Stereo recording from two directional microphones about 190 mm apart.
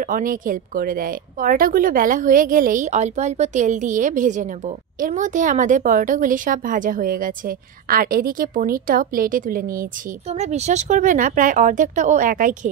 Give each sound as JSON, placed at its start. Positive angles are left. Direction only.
{"t": 0.0, "sound": "a woman's voice", "side_deg": -45}
{"t": 10.2, "sound": "a woman's voice", "side_deg": -35}